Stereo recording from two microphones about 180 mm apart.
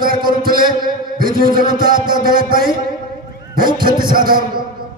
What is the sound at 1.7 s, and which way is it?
Speech, 50° right (ahead or behind).